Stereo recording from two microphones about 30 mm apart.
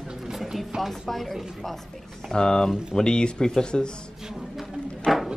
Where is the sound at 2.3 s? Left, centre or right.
Left.